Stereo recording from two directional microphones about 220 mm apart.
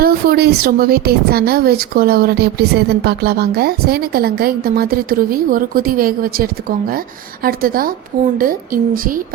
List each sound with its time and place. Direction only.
0.0 s a woman's voice: 45° right (ahead or behind)